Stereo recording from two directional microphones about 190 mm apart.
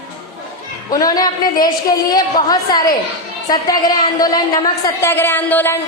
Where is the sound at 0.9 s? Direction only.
20° left (ahead or behind).